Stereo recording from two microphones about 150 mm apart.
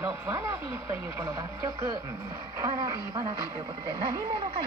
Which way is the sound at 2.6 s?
25° right (ahead or behind).